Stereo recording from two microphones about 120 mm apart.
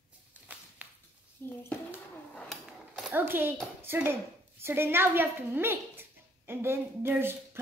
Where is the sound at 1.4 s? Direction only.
20° left (ahead or behind).